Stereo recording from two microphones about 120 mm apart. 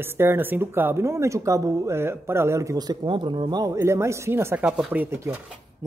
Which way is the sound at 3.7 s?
20° right (ahead or behind).